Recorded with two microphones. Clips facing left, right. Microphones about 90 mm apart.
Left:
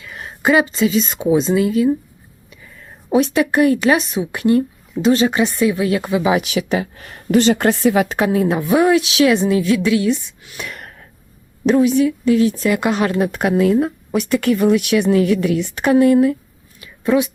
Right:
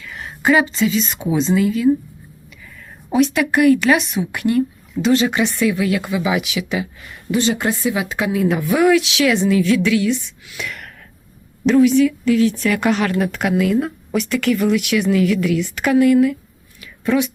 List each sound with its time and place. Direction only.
0.0 s a woman's voice: 25° left (ahead or behind)
3.3 s speech: 30° left (ahead or behind)
6.4 s speech: 45° left (ahead or behind)
7.3 s a woman's voice: 60° left (ahead or behind)
8.3 s speech: 35° left (ahead or behind)
10.4 s a sound: 35° left (ahead or behind)
11.7 s speech: 25° left (ahead or behind)